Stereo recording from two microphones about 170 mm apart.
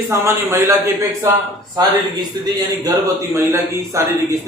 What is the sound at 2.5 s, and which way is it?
A man's voice, 20° right (ahead or behind).